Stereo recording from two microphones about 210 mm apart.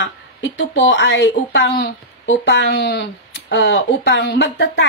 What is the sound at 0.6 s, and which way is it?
Speech, 60° left (ahead or behind).